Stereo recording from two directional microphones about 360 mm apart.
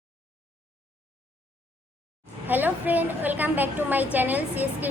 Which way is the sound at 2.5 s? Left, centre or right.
Centre.